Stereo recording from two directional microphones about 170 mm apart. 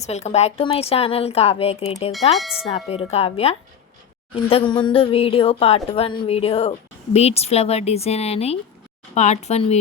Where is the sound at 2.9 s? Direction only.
35° left (ahead or behind).